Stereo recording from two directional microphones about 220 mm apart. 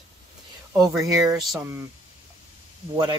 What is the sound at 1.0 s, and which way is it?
Speech, 15° right (ahead or behind).